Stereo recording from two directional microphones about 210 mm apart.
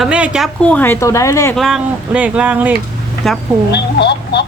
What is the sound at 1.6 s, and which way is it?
Speech, centre (ahead or behind).